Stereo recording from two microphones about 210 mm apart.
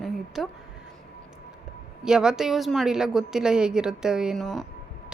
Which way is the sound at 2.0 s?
5° right (ahead or behind).